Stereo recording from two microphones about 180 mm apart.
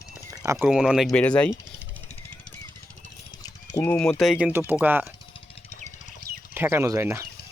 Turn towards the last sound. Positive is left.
turn(degrees=-15)  # may be behind; listen again after turning